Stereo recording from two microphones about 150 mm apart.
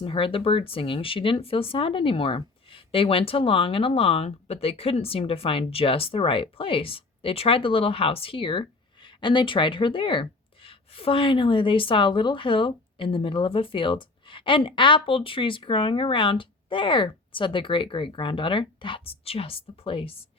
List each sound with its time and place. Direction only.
0.0 s speech: 35° left (ahead or behind)